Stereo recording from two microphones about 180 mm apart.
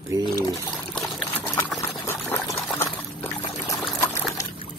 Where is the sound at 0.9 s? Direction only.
5° left (ahead or behind).